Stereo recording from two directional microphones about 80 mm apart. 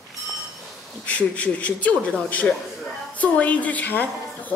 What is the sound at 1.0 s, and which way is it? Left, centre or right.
A woman's voice, centre.